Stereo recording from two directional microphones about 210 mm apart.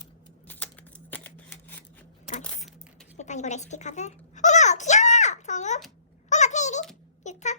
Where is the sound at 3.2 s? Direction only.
35° left (ahead or behind).